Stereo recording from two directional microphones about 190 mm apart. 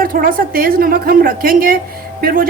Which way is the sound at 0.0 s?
50° right (ahead or behind).